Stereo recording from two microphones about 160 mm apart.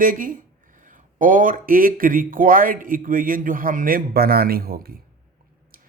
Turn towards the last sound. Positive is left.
turn(degrees=-70)  # may be behind; listen again after turning